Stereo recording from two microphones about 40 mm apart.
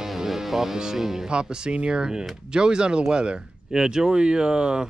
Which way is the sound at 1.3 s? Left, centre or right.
Right.